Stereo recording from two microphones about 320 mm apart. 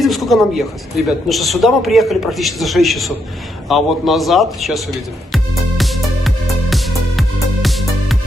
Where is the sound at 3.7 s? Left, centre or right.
Centre.